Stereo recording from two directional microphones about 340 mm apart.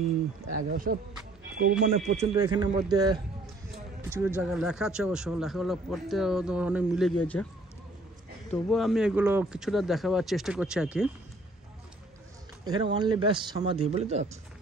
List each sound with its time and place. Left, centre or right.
0.6 s speech: right; by 3.2 s centre
4.4 s a man's voice: centre
8.5 s a man's voice: centre
12.6 s speech: centre